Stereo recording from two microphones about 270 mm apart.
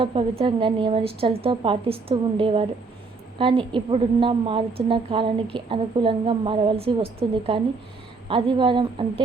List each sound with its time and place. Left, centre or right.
0.0 s a woman's voice: centre